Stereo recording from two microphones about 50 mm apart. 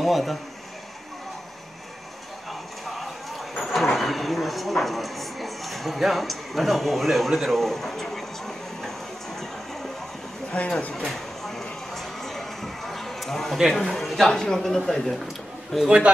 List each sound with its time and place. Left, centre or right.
0.0 s speech: centre
3.0 s a sound: centre
10.6 s speech: left
11.0 s a sound: centre
13.8 s a man's voice: centre
15.8 s a man's voice: centre